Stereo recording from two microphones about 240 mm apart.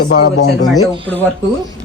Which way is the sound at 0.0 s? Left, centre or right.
Left.